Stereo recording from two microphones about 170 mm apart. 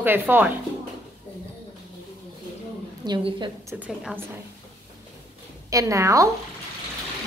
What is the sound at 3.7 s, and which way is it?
Speech, 5° right (ahead or behind).